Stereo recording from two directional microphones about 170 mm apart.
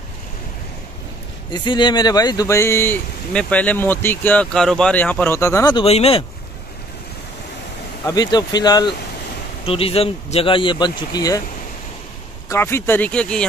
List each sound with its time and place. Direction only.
1.5 s speech: 25° left (ahead or behind)
5.8 s speech: 35° left (ahead or behind)
8.0 s speech: 20° left (ahead or behind)
12.4 s speech: 15° left (ahead or behind)